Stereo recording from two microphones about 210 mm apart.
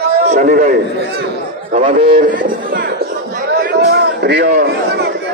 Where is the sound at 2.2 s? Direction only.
40° right (ahead or behind).